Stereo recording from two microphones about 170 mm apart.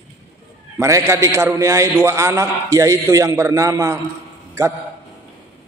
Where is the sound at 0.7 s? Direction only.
15° right (ahead or behind).